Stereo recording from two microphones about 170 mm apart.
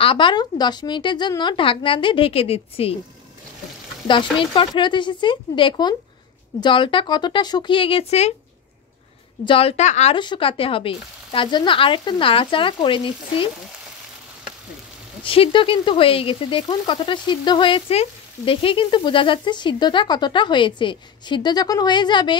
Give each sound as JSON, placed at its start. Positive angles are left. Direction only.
{"t": 0.0, "sound": "speech", "side_deg": 30}
{"t": 4.1, "sound": "speech", "side_deg": 30}
{"t": 9.4, "sound": "frying", "side_deg": 30}
{"t": 10.1, "sound": "frying", "side_deg": 30}
{"t": 15.2, "sound": "speech", "side_deg": 30}